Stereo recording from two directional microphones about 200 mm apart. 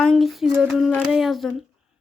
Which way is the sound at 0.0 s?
Centre (ahead or behind).